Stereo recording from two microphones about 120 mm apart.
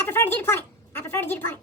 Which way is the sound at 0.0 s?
20° left (ahead or behind).